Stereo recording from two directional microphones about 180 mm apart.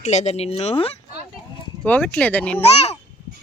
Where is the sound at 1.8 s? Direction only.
10° left (ahead or behind).